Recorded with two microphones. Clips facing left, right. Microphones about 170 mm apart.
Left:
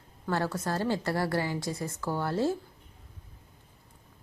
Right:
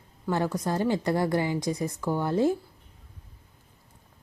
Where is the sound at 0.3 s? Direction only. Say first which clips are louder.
Right 3 dB; 15° right (ahead or behind).